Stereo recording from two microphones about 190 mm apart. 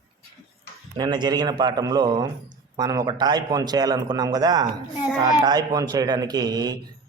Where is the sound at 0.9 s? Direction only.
20° right (ahead or behind).